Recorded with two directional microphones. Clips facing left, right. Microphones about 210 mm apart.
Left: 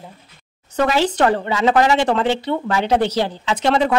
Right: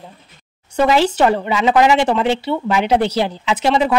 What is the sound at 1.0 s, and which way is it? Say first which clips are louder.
Speech: right 2 dB; 10° right (ahead or behind).